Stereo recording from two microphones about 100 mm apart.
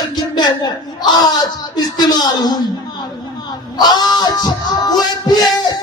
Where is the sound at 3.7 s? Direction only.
45° left (ahead or behind).